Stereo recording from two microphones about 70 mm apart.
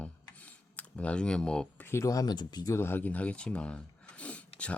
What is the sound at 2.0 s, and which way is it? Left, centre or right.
Speech, left.